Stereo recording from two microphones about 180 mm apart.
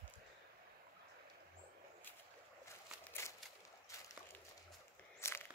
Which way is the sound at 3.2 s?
15° left (ahead or behind).